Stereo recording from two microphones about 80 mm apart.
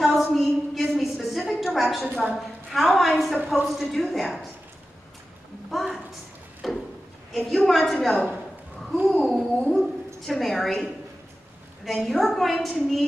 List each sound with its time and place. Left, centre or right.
0.0 s a sound: centre
2.2 s a woman's voice: centre
3.3 s speech: centre
3.6 s a woman's voice: centre
5.7 s a woman's voice: centre
6.6 s a sound: centre
7.3 s a woman's voice: centre
8.1 s a woman's voice: centre